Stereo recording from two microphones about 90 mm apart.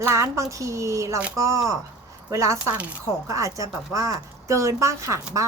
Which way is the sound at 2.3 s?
35° right (ahead or behind).